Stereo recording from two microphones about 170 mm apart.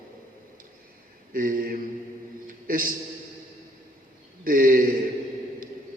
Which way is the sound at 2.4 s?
55° right (ahead or behind).